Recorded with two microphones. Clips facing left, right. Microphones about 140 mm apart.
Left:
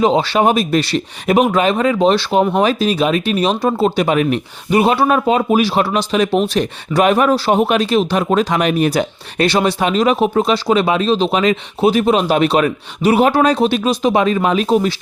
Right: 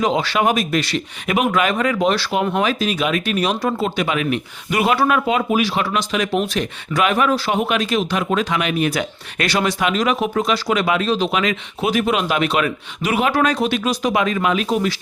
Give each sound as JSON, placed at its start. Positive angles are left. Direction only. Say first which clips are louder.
{"t": 0.0, "sound": "speech", "louder": "left 5 dB", "side_deg": 30}